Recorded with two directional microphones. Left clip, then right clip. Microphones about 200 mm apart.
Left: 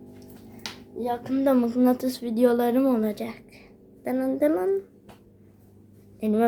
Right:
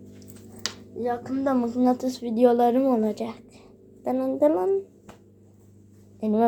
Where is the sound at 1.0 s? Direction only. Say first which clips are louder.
Left 1 dB; 10° left (ahead or behind).